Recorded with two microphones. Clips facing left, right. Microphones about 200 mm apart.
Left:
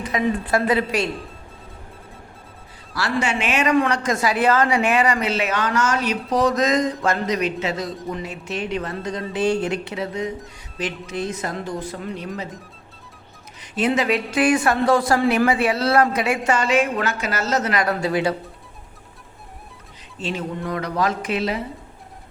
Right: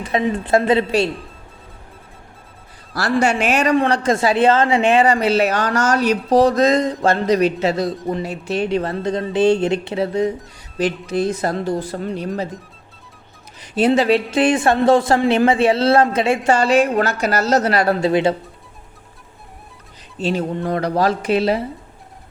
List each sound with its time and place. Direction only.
0.0 s speech: 25° right (ahead or behind)
2.9 s a woman's voice: 40° right (ahead or behind)
13.6 s speech: 30° right (ahead or behind)
20.1 s a woman's voice: 35° right (ahead or behind)